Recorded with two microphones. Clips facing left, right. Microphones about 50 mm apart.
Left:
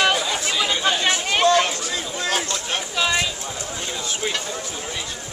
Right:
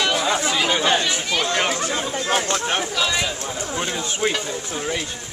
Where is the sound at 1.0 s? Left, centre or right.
Left.